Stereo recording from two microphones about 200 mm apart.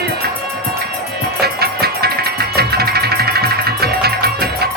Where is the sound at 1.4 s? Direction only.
50° right (ahead or behind).